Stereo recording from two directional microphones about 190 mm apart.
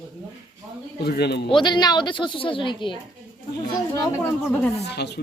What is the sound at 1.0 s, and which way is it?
Speech, 60° left (ahead or behind).